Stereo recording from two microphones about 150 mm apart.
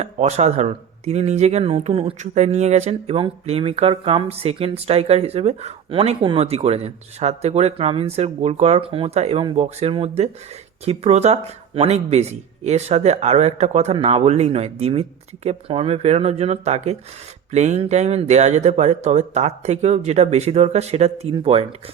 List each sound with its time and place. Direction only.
0.0 s speech: 50° right (ahead or behind)